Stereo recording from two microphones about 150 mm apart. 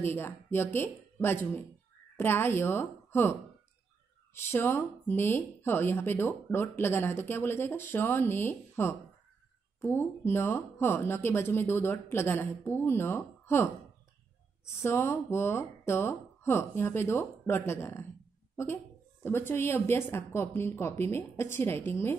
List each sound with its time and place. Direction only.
0.0 s a woman's voice: 15° left (ahead or behind)
4.5 s speech: 15° left (ahead or behind)
19.2 s speech: 15° left (ahead or behind)